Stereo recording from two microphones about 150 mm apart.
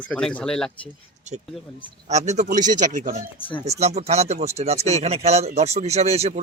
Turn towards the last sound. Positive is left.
turn(degrees=-45)  # may be behind; listen again after turning